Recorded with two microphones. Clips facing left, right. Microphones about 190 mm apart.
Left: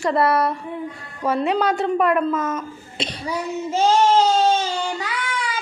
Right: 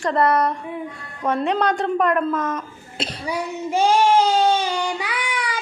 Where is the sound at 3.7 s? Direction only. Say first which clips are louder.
Even; 15° right (ahead or behind).